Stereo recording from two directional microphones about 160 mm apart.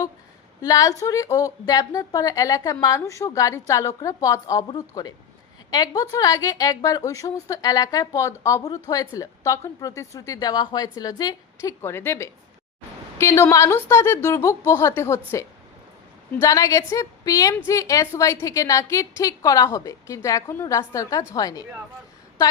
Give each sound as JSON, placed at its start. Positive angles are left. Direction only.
{"t": 0.6, "sound": "a woman's voice", "side_deg": 20}
{"t": 16.4, "sound": "a woman's voice", "side_deg": 20}